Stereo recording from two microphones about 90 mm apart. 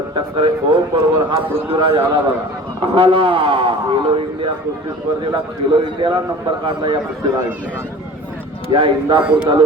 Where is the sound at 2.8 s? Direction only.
80° right.